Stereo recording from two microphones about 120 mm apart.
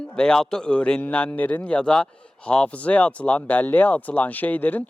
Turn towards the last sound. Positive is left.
turn(degrees=15)  # may be behind; listen again after turning